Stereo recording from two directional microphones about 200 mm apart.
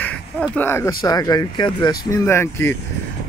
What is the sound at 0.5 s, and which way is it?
Speech, 10° left (ahead or behind).